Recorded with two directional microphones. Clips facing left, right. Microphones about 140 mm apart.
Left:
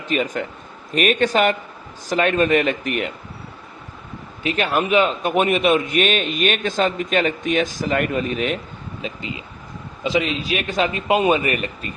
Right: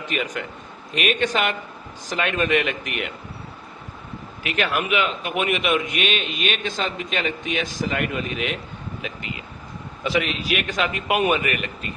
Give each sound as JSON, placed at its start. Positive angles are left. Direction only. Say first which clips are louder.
{"t": 0.1, "sound": "speech", "louder": "left 6 dB", "side_deg": 35}
{"t": 4.4, "sound": "a man's voice", "louder": "left 4 dB", "side_deg": 30}
{"t": 11.4, "sound": "speech", "louder": "left 3 dB", "side_deg": 35}